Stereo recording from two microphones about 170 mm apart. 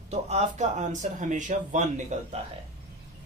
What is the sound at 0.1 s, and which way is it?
Speech, 40° right (ahead or behind).